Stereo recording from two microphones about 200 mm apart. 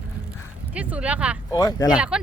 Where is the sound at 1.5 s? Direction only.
20° left (ahead or behind).